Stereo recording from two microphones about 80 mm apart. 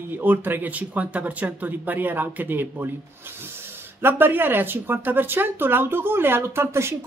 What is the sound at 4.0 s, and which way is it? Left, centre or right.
Speech, right.